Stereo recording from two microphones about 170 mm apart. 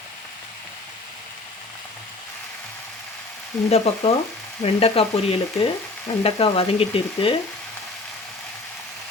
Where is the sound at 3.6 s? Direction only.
35° left (ahead or behind).